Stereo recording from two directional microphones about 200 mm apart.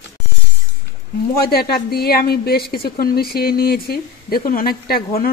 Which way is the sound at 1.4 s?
50° left (ahead or behind).